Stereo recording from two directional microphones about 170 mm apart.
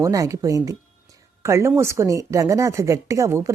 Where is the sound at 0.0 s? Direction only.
20° right (ahead or behind).